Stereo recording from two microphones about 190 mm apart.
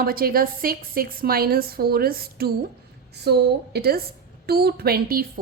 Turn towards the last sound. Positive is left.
turn(degrees=-50)  # may be behind; listen again after turning